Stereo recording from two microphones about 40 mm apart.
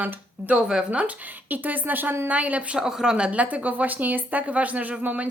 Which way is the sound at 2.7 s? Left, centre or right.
Centre.